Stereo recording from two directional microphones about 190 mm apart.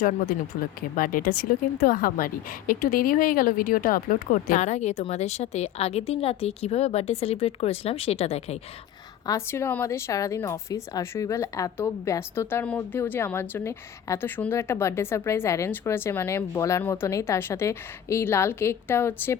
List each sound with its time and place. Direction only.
0.8 s speech: 45° left (ahead or behind)
9.2 s a woman's voice: 15° left (ahead or behind)